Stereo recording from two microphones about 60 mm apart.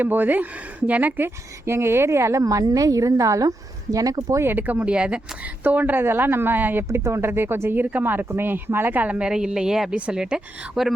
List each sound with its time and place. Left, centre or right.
0.0 s speech: right
1.6 s a woman's voice: right
3.9 s speech: right
4.4 s speech: right
4.9 s speech: centre
5.6 s speech: right
6.8 s speech: right; by 10.8 s centre